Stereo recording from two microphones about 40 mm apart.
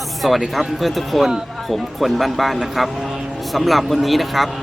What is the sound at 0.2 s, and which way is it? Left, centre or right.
Speech, centre.